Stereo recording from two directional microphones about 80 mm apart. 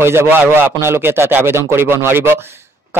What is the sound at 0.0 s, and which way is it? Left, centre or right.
Speech, right.